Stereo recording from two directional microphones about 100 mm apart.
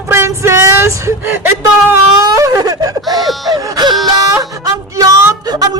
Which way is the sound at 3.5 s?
40° right (ahead or behind).